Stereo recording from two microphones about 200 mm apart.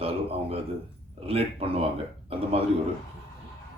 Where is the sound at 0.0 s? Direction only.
30° right (ahead or behind).